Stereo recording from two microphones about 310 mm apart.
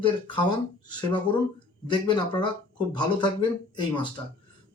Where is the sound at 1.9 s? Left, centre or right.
Centre.